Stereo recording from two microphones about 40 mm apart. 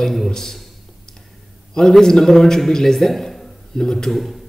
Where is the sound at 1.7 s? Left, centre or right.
Centre.